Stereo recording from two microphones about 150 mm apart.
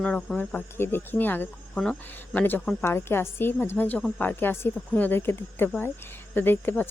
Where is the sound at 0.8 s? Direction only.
15° left (ahead or behind).